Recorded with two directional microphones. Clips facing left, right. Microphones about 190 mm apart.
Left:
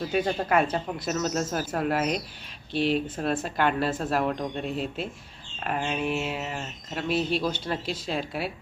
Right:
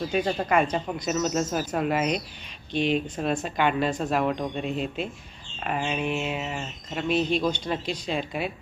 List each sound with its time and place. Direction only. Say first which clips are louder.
0.0 s speech: even; 5° left (ahead or behind)